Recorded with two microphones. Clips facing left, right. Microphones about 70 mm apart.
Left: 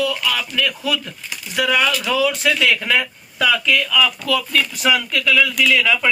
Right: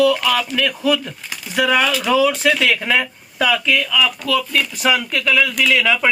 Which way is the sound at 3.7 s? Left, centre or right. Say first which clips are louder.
Even; centre.